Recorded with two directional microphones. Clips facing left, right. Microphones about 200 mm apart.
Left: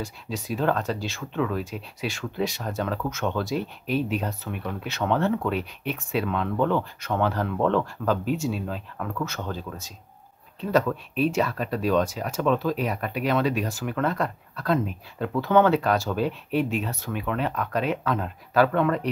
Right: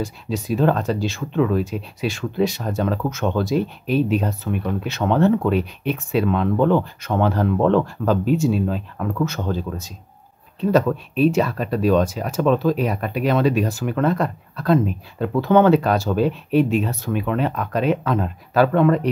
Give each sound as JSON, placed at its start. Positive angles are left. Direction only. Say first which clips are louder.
{"t": 0.0, "sound": "speech", "louder": "right 7 dB", "side_deg": -25}
{"t": 10.7, "sound": "speech", "louder": "right 5 dB", "side_deg": -30}